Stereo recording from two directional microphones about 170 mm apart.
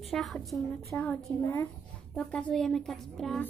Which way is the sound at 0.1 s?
Centre (ahead or behind).